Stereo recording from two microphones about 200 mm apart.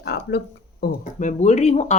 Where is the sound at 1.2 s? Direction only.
35° left (ahead or behind).